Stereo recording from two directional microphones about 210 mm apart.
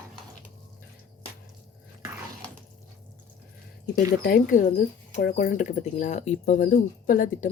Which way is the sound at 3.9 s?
40° left (ahead or behind).